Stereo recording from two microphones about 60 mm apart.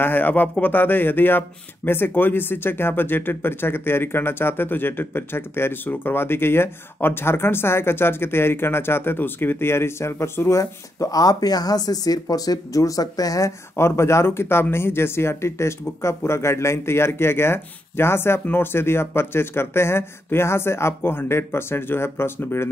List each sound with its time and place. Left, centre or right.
0.0 s speech: left
10.5 s speech: left
13.7 s speech: left